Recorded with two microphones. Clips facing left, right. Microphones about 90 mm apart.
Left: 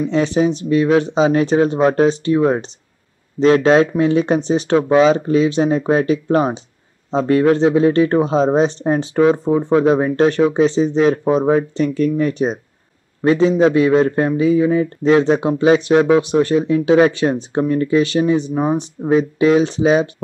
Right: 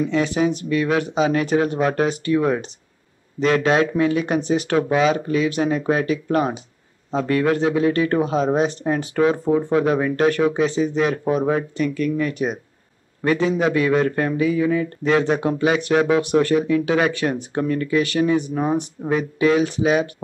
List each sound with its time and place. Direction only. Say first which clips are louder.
0.1 s a man's voice: left 4 dB; 25° left (ahead or behind)